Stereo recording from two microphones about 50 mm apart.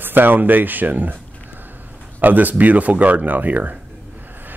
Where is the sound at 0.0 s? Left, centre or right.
Right.